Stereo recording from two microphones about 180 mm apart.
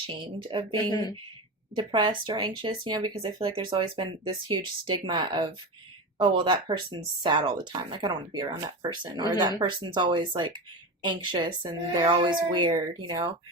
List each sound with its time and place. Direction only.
0.1 s speech: 30° right (ahead or behind)
0.8 s speech: 25° left (ahead or behind)
1.7 s speech: 25° right (ahead or behind)